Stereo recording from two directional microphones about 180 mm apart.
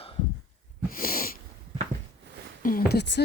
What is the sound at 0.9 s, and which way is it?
Sneeze, 55° left (ahead or behind).